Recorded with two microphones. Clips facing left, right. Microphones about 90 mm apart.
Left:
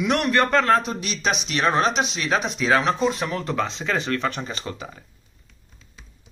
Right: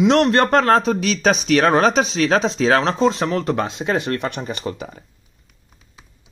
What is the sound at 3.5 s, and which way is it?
Speech, 55° right (ahead or behind).